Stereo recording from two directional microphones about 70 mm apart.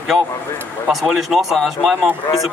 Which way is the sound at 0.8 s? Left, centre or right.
Centre.